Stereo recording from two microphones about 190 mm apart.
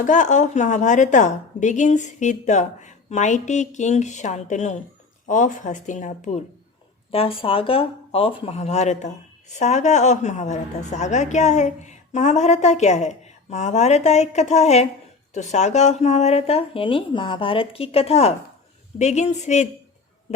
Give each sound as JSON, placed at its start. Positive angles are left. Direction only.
{"t": 0.0, "sound": "speech", "side_deg": 40}
{"t": 7.1, "sound": "speech", "side_deg": 30}